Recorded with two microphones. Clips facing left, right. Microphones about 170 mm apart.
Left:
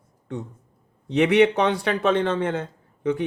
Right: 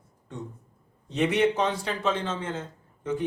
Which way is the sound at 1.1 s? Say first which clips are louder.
Left 6 dB; 65° left (ahead or behind).